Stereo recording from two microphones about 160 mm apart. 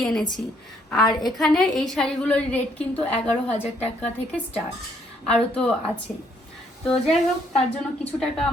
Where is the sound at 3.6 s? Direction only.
40° left (ahead or behind).